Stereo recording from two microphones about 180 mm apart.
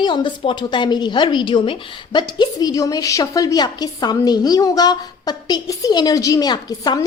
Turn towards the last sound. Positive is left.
turn(degrees=20)  # may be behind; listen again after turning